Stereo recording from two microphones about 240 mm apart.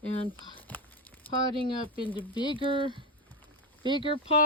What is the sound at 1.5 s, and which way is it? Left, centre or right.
Speech, right.